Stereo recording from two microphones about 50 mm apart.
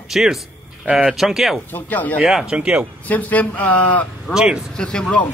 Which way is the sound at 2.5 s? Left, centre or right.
Right.